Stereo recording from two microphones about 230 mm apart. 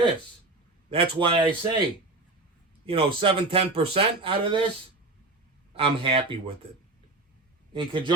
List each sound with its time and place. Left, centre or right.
0.9 s speech: right
2.8 s a man's voice: right
5.7 s speech: right
7.7 s speech: right